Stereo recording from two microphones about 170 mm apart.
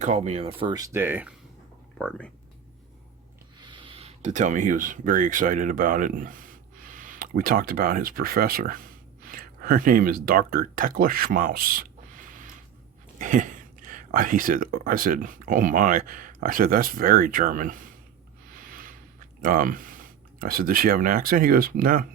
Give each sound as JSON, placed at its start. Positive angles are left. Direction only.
{"t": 0.0, "sound": "speech", "side_deg": -40}
{"t": 0.7, "sound": "speech", "side_deg": -15}
{"t": 2.0, "sound": "speech", "side_deg": 5}
{"t": 3.6, "sound": "speech", "side_deg": -30}
{"t": 18.5, "sound": "a sound", "side_deg": -55}
{"t": 19.4, "sound": "speech", "side_deg": -55}